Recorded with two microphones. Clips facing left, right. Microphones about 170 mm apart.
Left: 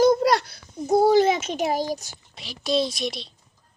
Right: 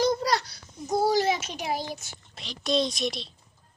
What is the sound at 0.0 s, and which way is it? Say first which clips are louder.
Babbling: left 7 dB; 50° left (ahead or behind).